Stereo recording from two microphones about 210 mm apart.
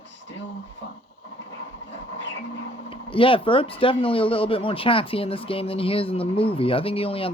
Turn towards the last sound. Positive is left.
turn(degrees=25)  # may be behind; listen again after turning